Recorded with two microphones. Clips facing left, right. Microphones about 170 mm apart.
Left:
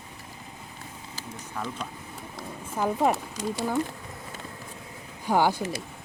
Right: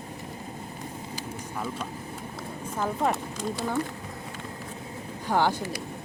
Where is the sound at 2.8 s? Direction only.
10° left (ahead or behind).